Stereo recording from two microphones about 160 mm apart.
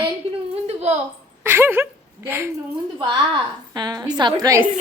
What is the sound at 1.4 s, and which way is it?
A woman's voice, 15° right (ahead or behind).